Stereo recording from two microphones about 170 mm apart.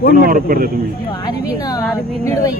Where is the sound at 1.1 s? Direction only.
20° left (ahead or behind).